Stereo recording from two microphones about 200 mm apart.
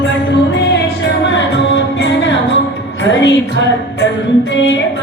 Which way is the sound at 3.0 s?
60° left (ahead or behind).